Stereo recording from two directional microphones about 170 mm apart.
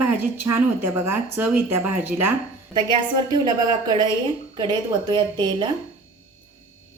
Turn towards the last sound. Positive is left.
turn(degrees=-25)  # may be behind; listen again after turning